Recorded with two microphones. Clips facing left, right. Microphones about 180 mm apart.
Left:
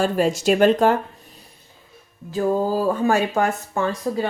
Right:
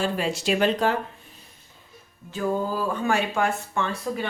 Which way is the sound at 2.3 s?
40° left (ahead or behind).